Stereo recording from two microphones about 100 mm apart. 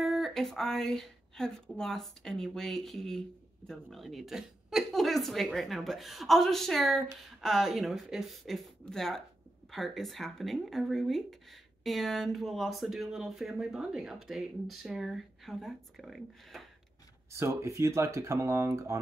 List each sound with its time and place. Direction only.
0.0 s speech: centre (ahead or behind)
17.3 s speech: 30° right (ahead or behind)